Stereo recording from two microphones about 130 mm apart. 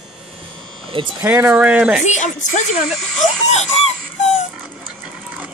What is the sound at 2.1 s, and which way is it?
Speech, 65° left (ahead or behind).